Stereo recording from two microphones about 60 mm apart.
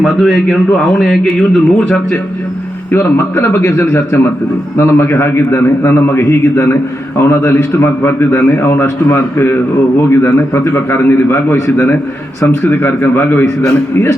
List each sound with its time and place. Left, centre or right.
0.0 s a man's voice: centre
1.4 s speech: centre
2.9 s a man's voice: left
11.5 s a man's voice: left
12.5 s a man's voice: left